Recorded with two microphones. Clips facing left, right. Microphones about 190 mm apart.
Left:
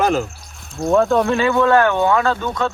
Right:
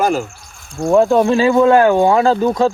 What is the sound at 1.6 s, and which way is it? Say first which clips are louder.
Speech: right 4 dB; 20° right (ahead or behind).